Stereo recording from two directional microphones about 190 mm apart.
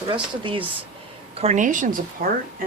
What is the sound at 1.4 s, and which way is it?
Speech, 35° right (ahead or behind).